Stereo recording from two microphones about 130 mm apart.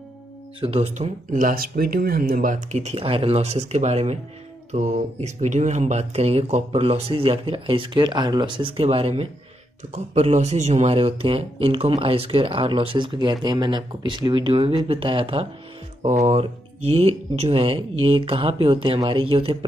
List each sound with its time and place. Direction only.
0.6 s speech: 45° right (ahead or behind)
1.3 s speech: 90° right; by 15.4 s 40° right (ahead or behind)
16.0 s speech: 60° right (ahead or behind)
17.6 s speech: 40° right (ahead or behind)